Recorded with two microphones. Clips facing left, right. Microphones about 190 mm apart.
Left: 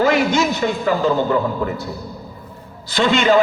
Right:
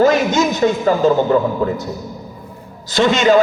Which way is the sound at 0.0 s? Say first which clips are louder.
Right 3 dB; 45° right (ahead or behind).